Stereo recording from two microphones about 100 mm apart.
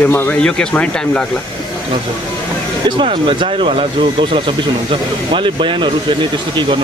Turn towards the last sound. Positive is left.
turn(degrees=-55)  # may be behind; listen again after turning